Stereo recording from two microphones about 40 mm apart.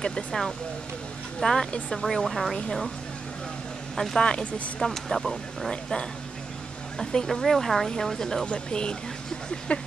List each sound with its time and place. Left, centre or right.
0.0 s speech: centre
3.9 s speech: centre
4.2 s speech: left
4.7 s speech: centre
5.7 s speech: left